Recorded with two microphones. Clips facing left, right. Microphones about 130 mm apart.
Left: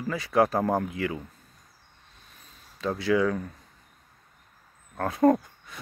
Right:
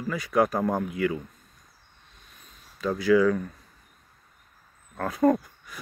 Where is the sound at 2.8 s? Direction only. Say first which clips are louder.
Right 3 dB; 25° left (ahead or behind).